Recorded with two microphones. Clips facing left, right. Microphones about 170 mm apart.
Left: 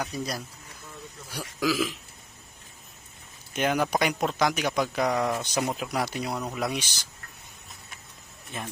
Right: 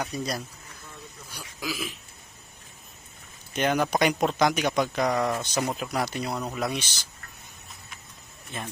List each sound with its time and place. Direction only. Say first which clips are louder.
0.0 s speech: right 1 dB; centre (ahead or behind)
1.3 s speech: left 8 dB; 90° left
3.5 s speech: right 1 dB; 5° left (ahead or behind)